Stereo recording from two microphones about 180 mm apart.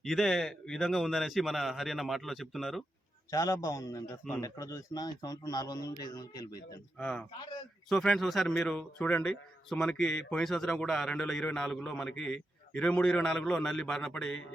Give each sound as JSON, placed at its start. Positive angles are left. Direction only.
{"t": 0.0, "sound": "a man's voice", "side_deg": 0}
{"t": 3.3, "sound": "a man's voice", "side_deg": 20}
{"t": 7.0, "sound": "a man's voice", "side_deg": 5}